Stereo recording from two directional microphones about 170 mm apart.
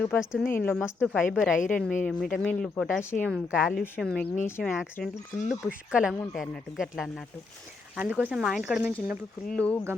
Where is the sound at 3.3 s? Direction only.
5° right (ahead or behind).